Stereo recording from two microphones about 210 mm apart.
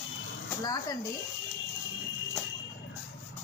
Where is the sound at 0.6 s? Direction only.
15° left (ahead or behind).